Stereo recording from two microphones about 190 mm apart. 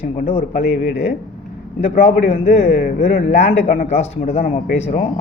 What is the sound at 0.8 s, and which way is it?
Speech, 60° left (ahead or behind).